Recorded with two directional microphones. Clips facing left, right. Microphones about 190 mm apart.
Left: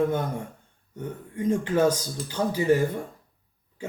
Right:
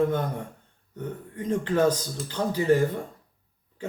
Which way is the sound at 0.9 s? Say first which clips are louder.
Left 1 dB; 10° left (ahead or behind).